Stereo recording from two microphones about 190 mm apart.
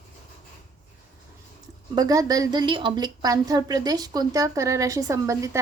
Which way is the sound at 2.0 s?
20° right (ahead or behind).